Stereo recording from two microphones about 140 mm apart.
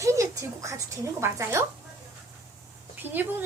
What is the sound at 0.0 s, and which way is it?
A woman's voice, 20° right (ahead or behind).